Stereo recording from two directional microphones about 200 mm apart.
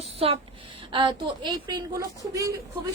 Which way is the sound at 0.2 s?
30° right (ahead or behind).